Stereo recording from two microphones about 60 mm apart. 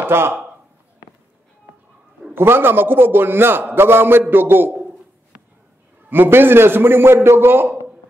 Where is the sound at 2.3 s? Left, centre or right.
Right.